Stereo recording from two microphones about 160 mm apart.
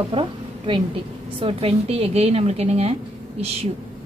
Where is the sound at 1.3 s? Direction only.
35° right (ahead or behind).